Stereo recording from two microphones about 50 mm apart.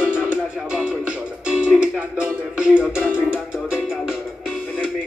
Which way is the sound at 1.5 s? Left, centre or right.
Centre.